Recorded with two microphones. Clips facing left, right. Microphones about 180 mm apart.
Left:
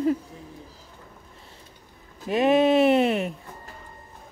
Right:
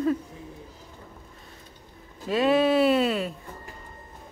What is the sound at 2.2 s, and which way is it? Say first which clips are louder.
Speech: left 2 dB; 20° left (ahead or behind).